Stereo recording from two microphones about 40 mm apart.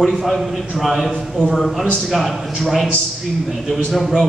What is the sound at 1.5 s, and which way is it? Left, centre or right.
Speech, centre.